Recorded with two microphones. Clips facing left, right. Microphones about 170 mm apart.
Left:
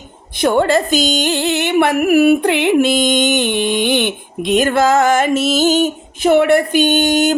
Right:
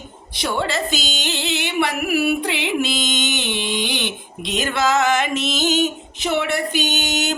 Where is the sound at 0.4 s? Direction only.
50° left (ahead or behind).